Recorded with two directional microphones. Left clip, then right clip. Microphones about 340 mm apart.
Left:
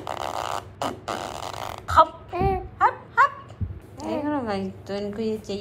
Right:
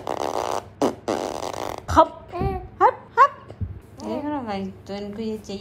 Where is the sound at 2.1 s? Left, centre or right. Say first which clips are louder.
Left 3 dB; centre.